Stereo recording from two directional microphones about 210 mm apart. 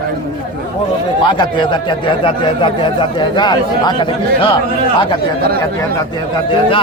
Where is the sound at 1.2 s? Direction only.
20° left (ahead or behind).